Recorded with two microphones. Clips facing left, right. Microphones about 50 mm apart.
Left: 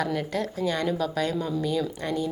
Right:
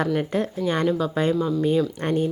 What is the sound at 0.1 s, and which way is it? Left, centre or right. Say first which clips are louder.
Speech: right 5 dB; right.